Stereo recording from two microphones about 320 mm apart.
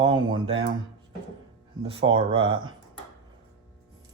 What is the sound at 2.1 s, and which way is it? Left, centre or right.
Speech, centre.